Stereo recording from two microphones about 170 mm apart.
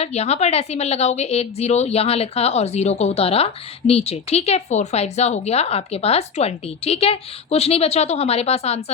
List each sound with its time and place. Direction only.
0.0 s a woman's voice: 40° left (ahead or behind)